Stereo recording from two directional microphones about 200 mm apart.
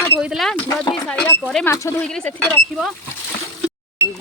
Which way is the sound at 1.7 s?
15° left (ahead or behind).